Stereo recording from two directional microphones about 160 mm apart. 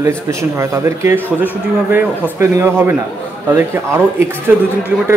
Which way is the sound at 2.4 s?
15° right (ahead or behind).